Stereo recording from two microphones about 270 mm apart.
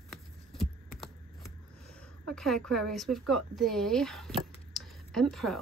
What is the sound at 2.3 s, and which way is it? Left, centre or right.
Speech, centre.